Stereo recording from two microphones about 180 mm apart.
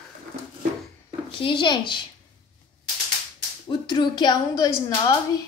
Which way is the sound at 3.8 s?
25° left (ahead or behind).